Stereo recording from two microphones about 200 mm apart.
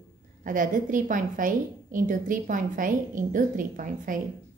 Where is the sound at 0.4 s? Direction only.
40° right (ahead or behind).